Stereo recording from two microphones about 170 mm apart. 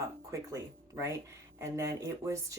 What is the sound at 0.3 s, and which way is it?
Speech, 15° right (ahead or behind).